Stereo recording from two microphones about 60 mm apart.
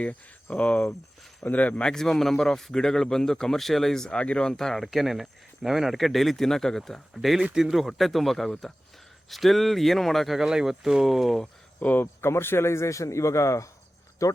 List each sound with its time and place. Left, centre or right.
0.5 s speech: left
1.8 s a man's voice: centre
11.8 s speech: left
12.2 s a man's voice: left